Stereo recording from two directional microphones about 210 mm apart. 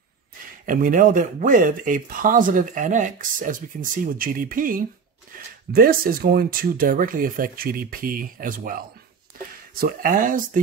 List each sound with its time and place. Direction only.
0.7 s speech: 40° right (ahead or behind)
5.3 s a sound: 40° right (ahead or behind)
5.7 s speech: 45° right (ahead or behind)